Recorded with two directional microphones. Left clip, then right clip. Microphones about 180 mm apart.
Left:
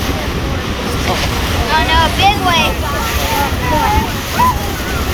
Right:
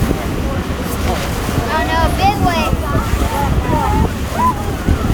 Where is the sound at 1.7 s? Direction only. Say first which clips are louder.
Left 4 dB; 65° right (ahead or behind).